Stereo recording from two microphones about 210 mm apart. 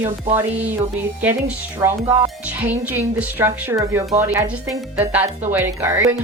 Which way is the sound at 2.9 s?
10° right (ahead or behind).